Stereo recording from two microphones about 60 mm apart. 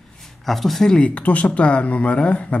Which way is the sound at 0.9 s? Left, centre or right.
Left.